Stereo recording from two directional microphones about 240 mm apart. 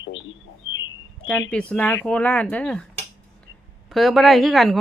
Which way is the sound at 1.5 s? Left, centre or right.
Centre.